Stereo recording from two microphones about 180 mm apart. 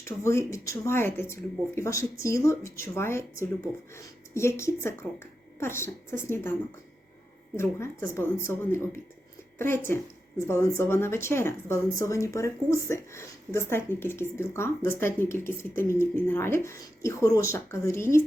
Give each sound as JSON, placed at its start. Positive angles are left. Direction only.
{"t": 0.0, "sound": "a woman's voice", "side_deg": 15}